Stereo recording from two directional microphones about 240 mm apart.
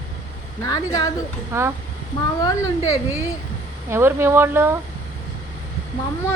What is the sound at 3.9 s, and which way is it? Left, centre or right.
Speech, centre.